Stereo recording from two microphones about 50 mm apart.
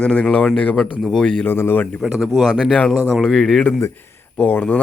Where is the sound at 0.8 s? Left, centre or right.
Centre.